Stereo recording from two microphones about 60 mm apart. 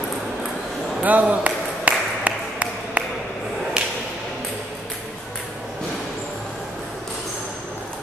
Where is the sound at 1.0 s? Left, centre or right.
Right.